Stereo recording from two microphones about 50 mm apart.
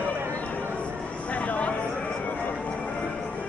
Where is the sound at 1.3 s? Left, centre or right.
Left.